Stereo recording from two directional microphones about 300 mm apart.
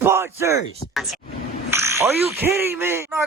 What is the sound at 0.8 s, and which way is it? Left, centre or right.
Speech, centre.